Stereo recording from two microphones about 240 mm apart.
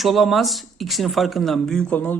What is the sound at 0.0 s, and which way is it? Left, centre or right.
Speech, centre.